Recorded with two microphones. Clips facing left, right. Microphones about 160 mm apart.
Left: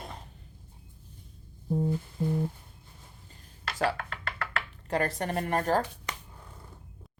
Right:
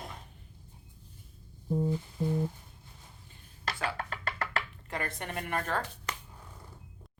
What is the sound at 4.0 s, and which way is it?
Music, 40° right (ahead or behind).